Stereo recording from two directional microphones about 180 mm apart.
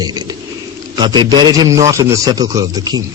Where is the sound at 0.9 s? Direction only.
25° right (ahead or behind).